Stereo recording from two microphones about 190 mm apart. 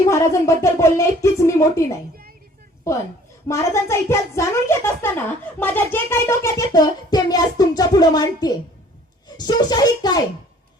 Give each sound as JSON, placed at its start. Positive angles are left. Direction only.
{"t": 0.0, "sound": "a child's voice", "side_deg": 15}